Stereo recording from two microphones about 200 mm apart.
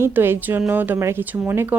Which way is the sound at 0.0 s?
10° right (ahead or behind).